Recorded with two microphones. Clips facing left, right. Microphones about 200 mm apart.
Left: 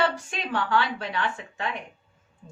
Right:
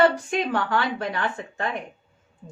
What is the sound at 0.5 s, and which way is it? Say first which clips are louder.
A woman's voice: right 1 dB; 45° right (ahead or behind).